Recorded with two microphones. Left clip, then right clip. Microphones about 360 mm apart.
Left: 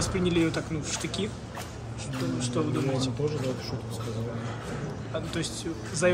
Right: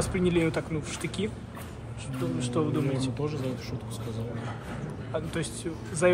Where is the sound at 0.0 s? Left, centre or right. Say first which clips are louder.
Even; centre.